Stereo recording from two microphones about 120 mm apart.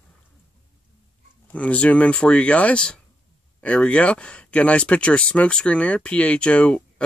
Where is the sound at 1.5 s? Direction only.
10° left (ahead or behind).